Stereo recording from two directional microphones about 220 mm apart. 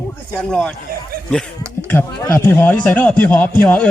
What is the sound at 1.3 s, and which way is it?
A man's voice, 5° left (ahead or behind).